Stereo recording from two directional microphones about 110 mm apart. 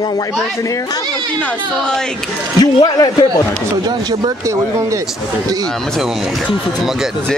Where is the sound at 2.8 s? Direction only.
40° left (ahead or behind).